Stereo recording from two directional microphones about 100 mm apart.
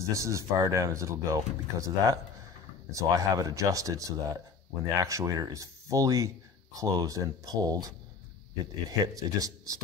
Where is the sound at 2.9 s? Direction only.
35° right (ahead or behind).